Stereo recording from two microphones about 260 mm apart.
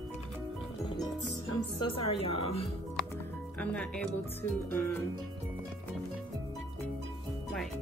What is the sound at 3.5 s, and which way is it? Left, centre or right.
Speech, centre.